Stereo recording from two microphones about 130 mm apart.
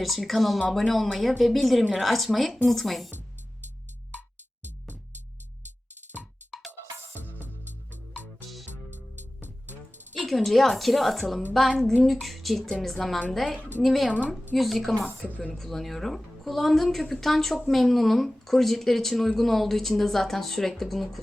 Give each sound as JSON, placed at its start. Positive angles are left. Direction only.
{"t": 0.0, "sound": "speech", "side_deg": 0}
{"t": 6.4, "sound": "music", "side_deg": -65}
{"t": 8.7, "sound": "music", "side_deg": -65}
{"t": 10.2, "sound": "speech", "side_deg": 0}